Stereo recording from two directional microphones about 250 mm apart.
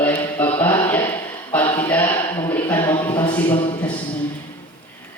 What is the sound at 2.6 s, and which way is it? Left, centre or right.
Music, centre.